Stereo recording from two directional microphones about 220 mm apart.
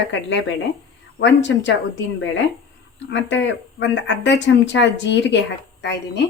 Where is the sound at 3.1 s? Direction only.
55° left (ahead or behind).